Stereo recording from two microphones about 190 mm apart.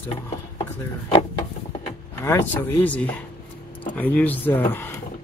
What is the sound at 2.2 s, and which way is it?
Speech, 10° left (ahead or behind).